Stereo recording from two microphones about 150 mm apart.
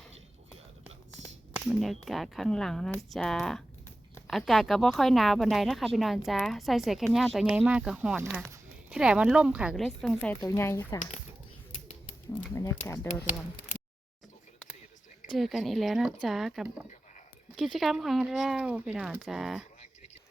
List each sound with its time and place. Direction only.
1.7 s speech: centre (ahead or behind)
10.4 s speech: 20° left (ahead or behind)
11.7 s bird: 45° left (ahead or behind)
12.5 s speech: 20° left (ahead or behind)
15.3 s speech: centre (ahead or behind)